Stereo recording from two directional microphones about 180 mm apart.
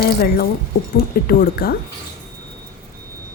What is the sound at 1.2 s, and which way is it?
Speech, 55° left (ahead or behind).